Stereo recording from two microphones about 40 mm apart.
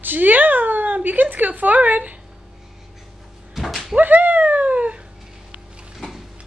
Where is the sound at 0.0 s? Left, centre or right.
Right.